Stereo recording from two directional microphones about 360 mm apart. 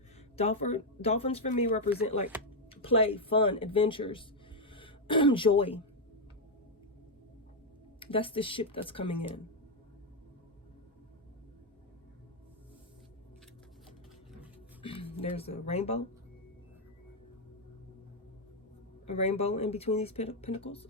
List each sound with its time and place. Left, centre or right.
0.3 s speech: centre
7.9 s speech: centre
14.8 s speech: centre
19.0 s speech: centre